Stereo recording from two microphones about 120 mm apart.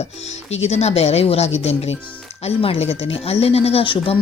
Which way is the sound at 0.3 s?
65° left (ahead or behind).